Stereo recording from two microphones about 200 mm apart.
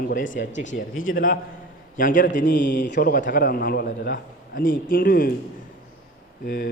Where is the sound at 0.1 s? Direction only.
40° left (ahead or behind).